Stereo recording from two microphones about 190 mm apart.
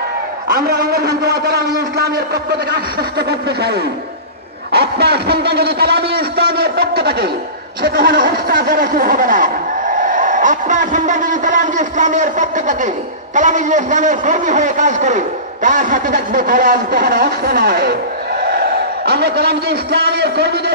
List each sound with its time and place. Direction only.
0.5 s a man's voice: 60° right (ahead or behind)